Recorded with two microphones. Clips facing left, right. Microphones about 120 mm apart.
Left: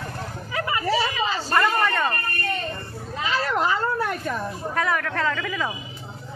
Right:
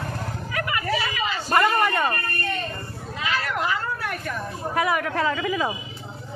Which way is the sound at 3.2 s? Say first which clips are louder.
Left 3 dB; 30° left (ahead or behind).